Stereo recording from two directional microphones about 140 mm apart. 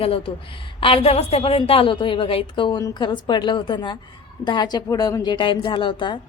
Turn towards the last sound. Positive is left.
turn(degrees=35)  # may be behind; listen again after turning